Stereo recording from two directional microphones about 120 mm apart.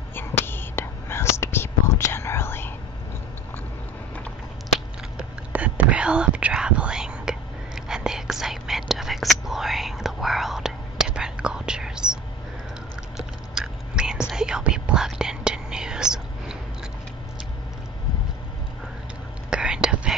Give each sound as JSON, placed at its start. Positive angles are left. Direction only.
{"t": 0.1, "sound": "whispering", "side_deg": 20}
{"t": 4.7, "sound": "whispering", "side_deg": -10}
{"t": 13.6, "sound": "whispering", "side_deg": -5}
{"t": 19.5, "sound": "whispering", "side_deg": -5}